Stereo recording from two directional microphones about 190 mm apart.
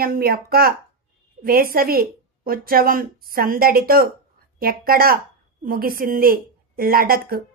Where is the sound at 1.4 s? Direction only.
50° right (ahead or behind).